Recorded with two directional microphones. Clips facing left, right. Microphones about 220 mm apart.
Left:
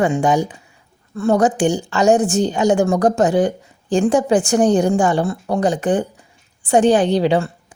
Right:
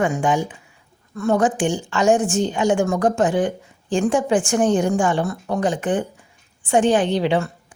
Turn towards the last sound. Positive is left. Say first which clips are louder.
# left 4 dB
turn(degrees=35)  # may be behind; listen again after turning